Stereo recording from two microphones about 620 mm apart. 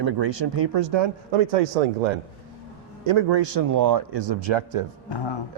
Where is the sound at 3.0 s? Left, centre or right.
Right.